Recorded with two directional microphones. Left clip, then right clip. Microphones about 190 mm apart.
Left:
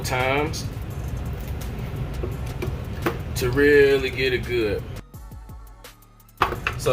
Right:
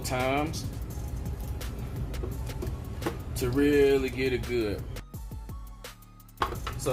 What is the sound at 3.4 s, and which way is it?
Speech, 40° right (ahead or behind).